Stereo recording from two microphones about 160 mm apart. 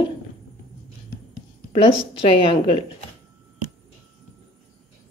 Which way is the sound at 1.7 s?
35° left (ahead or behind).